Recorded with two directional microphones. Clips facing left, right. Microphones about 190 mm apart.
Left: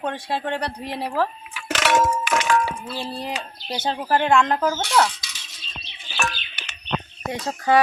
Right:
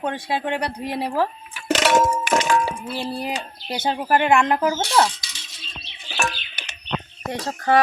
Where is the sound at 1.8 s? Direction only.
40° right (ahead or behind).